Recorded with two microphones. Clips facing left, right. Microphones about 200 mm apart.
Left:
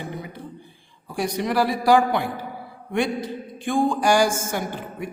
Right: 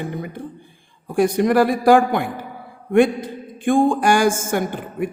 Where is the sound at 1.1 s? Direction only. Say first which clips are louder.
Right 8 dB; 50° right (ahead or behind).